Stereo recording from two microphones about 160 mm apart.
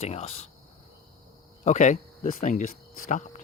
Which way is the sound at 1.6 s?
45° left (ahead or behind).